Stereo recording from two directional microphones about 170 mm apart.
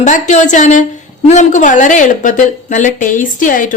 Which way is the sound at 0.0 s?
45° left (ahead or behind).